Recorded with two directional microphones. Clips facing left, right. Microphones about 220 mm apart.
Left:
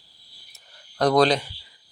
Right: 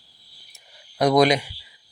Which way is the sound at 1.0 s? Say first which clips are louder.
Right 1 dB; 10° right (ahead or behind).